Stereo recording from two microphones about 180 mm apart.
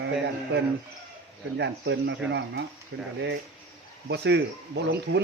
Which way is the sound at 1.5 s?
75° right (ahead or behind).